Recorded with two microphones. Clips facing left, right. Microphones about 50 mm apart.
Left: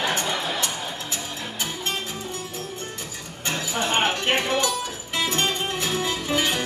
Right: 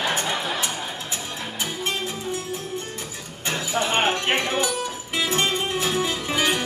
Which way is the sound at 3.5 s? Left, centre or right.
Right.